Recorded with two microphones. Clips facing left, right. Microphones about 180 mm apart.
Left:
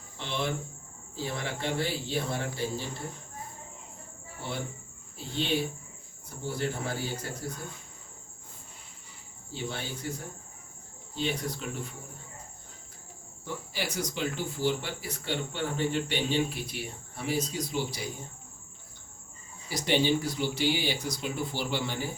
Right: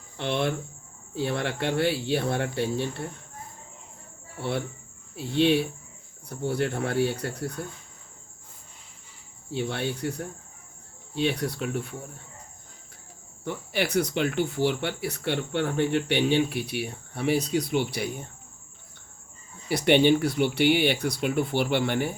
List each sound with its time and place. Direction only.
0.2 s speech: 65° right (ahead or behind)
4.4 s cricket: 65° right (ahead or behind)
5.1 s speech: 65° right (ahead or behind)
9.5 s speech: 65° right (ahead or behind)
13.4 s speech: 65° right (ahead or behind)
19.6 s speech: 65° right (ahead or behind)